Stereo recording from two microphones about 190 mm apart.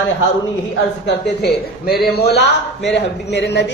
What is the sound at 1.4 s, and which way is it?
A man's voice, 55° left (ahead or behind).